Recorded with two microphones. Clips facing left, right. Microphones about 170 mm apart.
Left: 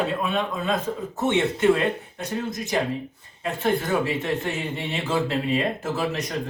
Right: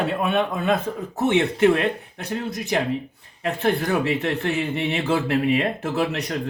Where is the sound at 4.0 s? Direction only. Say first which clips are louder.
Right 2 dB; 65° right (ahead or behind).